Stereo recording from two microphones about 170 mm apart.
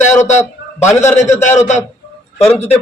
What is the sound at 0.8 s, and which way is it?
Speech, 15° left (ahead or behind).